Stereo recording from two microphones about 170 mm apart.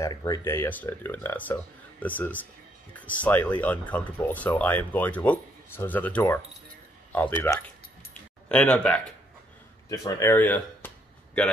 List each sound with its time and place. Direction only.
0.0 s speech: 20° left (ahead or behind)
9.8 s speech: 20° left (ahead or behind)